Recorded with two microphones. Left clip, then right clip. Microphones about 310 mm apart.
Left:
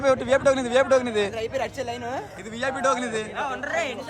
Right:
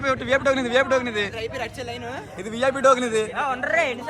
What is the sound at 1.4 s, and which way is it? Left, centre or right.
Speech, left.